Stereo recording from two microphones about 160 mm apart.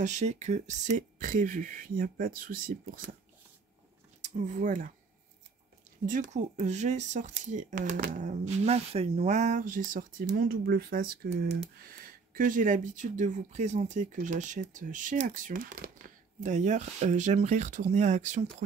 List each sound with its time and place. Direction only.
0.0 s speech: 45° right (ahead or behind)
0.9 s speech: 55° right (ahead or behind)
4.2 s speech: 50° right (ahead or behind)
6.0 s speech: 55° right (ahead or behind)